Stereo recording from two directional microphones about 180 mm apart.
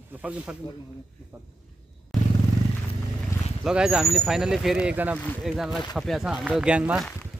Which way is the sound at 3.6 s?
5° right (ahead or behind).